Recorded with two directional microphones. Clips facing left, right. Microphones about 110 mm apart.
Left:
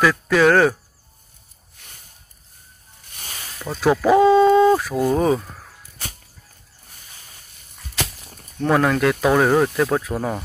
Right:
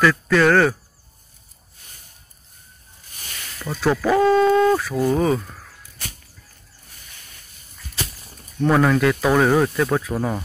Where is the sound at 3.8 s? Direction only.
10° left (ahead or behind).